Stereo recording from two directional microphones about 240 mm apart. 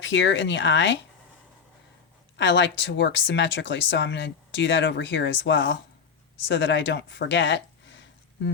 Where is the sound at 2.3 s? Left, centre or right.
Left.